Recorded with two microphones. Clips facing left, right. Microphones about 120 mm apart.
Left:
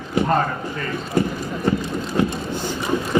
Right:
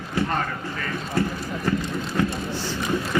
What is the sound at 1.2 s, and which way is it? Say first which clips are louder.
Speech: left 4 dB; 20° left (ahead or behind).